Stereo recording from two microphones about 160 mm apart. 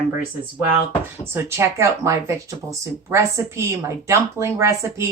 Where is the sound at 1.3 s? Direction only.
15° right (ahead or behind).